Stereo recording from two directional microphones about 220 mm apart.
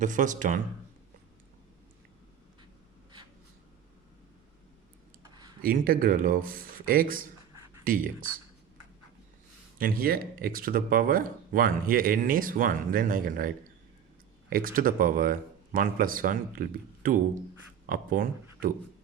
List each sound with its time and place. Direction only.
0.0 s speech: 35° right (ahead or behind)
5.2 s a sound: 20° right (ahead or behind)
5.6 s speech: 40° right (ahead or behind)
9.7 s speech: 40° right (ahead or behind)
14.5 s speech: 40° right (ahead or behind)